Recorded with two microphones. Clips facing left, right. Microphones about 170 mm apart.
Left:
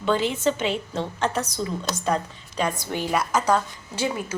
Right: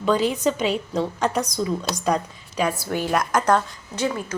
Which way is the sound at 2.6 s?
5° right (ahead or behind).